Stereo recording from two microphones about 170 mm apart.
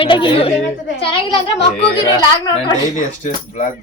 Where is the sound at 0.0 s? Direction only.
30° left (ahead or behind).